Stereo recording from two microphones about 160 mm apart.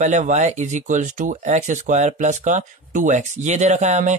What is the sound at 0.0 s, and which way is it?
Speech, 50° right (ahead or behind).